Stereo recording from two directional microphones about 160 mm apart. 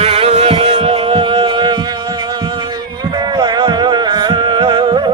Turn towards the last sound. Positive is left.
turn(degrees=-30)  # may be behind; listen again after turning